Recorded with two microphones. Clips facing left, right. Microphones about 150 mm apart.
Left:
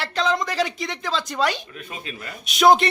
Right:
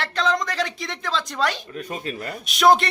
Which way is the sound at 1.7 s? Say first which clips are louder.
Right 6 dB; 40° right (ahead or behind).